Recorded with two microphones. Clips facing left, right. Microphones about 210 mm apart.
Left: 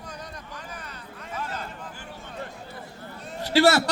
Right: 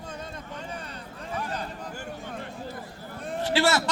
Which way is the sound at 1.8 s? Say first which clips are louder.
Right 4 dB; 45° right (ahead or behind).